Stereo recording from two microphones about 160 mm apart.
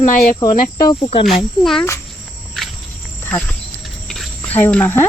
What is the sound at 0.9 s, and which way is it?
Speech, 35° left (ahead or behind).